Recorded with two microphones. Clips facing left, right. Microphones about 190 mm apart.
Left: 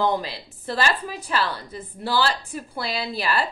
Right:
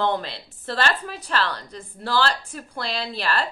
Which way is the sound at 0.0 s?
5° left (ahead or behind).